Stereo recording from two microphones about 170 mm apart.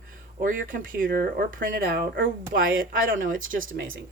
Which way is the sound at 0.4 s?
55° right (ahead or behind).